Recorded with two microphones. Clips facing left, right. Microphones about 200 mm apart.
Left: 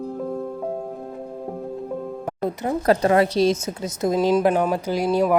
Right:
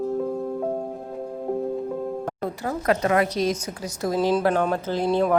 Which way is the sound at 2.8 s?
35° left (ahead or behind).